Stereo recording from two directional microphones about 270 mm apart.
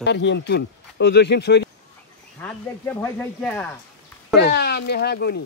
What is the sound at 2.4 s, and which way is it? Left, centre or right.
Speech, centre.